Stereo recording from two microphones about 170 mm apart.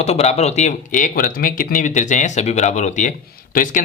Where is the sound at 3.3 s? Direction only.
55° left (ahead or behind).